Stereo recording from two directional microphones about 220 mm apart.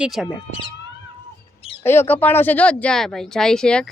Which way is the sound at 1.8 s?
10° left (ahead or behind).